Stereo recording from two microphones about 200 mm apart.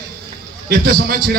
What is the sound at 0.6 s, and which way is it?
Speech, 50° right (ahead or behind).